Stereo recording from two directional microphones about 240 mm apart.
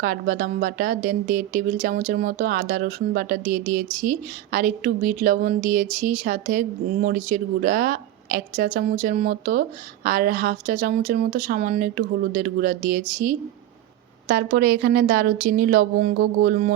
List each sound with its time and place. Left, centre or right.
0.0 s a woman's voice: right